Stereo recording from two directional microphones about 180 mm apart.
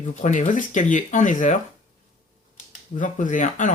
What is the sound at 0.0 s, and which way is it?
Speech, 45° left (ahead or behind).